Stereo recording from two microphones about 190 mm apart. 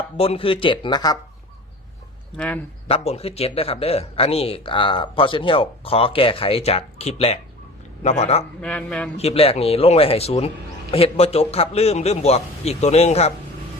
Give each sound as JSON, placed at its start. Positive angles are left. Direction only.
{"t": 0.2, "sound": "speech", "side_deg": 30}
{"t": 2.3, "sound": "speech", "side_deg": 5}
{"t": 2.8, "sound": "speech", "side_deg": 30}
{"t": 8.6, "sound": "a man's voice", "side_deg": 5}
{"t": 9.1, "sound": "speech", "side_deg": 30}